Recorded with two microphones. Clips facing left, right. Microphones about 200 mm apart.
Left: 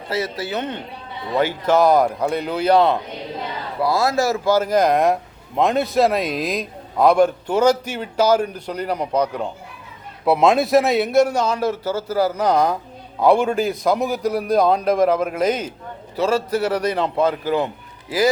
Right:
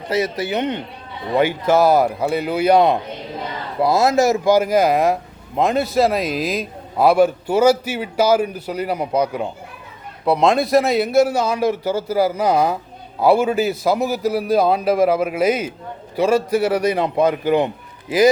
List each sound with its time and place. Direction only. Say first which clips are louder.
0.1 s a man's voice: right 4 dB; 20° right (ahead or behind)
10.2 s a man's voice: even; 5° left (ahead or behind); by 17.7 s 20° right (ahead or behind)